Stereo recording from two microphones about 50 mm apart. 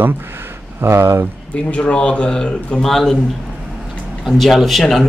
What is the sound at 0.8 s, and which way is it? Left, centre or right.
Speech, right.